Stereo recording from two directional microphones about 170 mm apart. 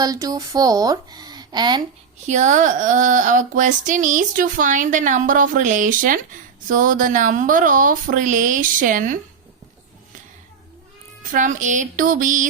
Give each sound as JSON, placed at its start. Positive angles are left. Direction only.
{"t": 0.0, "sound": "speech", "side_deg": -20}
{"t": 2.2, "sound": "speech", "side_deg": -45}
{"t": 11.2, "sound": "speech", "side_deg": -50}